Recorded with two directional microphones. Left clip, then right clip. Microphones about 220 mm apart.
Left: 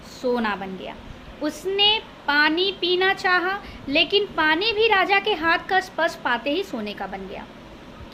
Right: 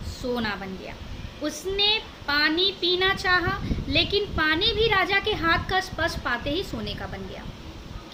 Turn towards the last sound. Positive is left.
turn(degrees=-10)  # may be behind; listen again after turning